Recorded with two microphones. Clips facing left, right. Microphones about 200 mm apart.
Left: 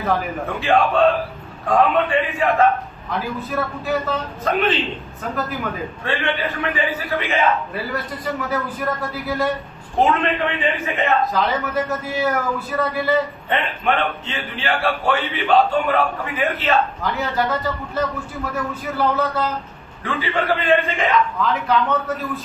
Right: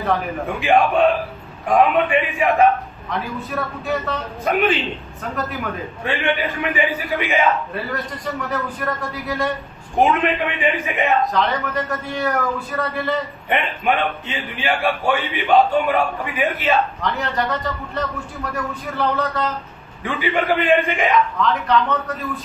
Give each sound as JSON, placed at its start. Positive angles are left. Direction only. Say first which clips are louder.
{"t": 0.0, "sound": "a man's voice", "louder": "even", "side_deg": 0}
{"t": 0.5, "sound": "a man's voice", "louder": "right 1 dB", "side_deg": -15}
{"t": 3.1, "sound": "a man's voice", "louder": "left 1 dB", "side_deg": 0}
{"t": 5.2, "sound": "a man's voice", "louder": "left 1 dB", "side_deg": 0}
{"t": 6.0, "sound": "a man's voice", "louder": "right 2 dB", "side_deg": -15}
{"t": 7.7, "sound": "a man's voice", "louder": "even", "side_deg": 5}
{"t": 9.9, "sound": "a man's voice", "louder": "right 1 dB", "side_deg": -15}
{"t": 11.3, "sound": "a man's voice", "louder": "even", "side_deg": 0}
{"t": 13.5, "sound": "a man's voice", "louder": "right 4 dB", "side_deg": -15}
{"t": 17.0, "sound": "a man's voice", "louder": "left 1 dB", "side_deg": 0}
{"t": 20.0, "sound": "a man's voice", "louder": "right 2 dB", "side_deg": -15}
{"t": 21.4, "sound": "a man's voice", "louder": "right 1 dB", "side_deg": 5}